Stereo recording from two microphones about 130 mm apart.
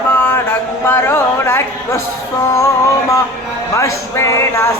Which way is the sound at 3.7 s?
25° left (ahead or behind).